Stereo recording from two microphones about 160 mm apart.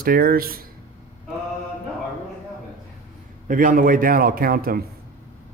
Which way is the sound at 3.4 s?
60° right (ahead or behind).